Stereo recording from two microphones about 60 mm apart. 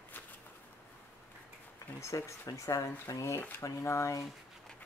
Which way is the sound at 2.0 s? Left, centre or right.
Left.